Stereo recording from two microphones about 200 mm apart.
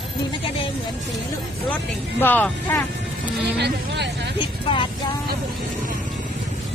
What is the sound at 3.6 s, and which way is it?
Speech, 55° right (ahead or behind).